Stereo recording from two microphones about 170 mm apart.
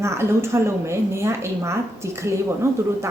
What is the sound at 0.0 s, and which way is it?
A woman's voice, 15° right (ahead or behind).